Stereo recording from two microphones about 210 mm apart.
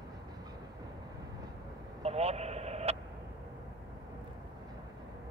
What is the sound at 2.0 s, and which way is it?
Vehicle, 30° right (ahead or behind).